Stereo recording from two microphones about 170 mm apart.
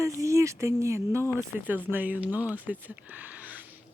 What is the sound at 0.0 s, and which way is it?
Speech, 15° right (ahead or behind).